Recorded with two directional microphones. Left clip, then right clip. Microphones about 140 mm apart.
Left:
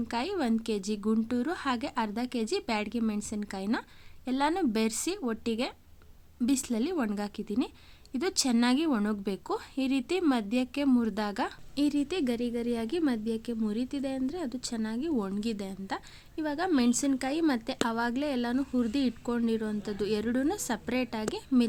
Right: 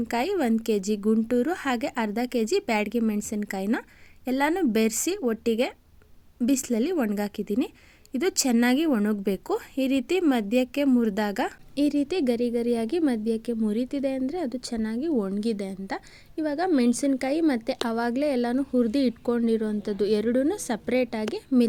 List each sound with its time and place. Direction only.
0.1 s a woman's voice: 25° right (ahead or behind)